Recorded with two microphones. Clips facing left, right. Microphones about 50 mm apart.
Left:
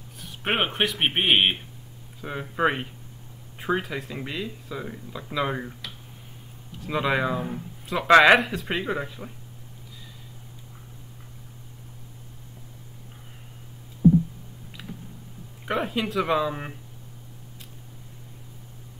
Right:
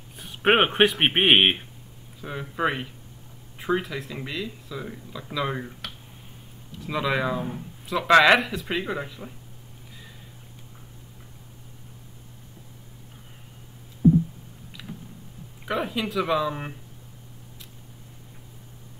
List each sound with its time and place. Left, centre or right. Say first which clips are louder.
0.2 s speech: right 6 dB; right
2.2 s speech: left 2 dB; centre
5.5 s speech: left 1 dB; centre
6.9 s speech: left 1 dB; centre
15.7 s speech: left 1 dB; centre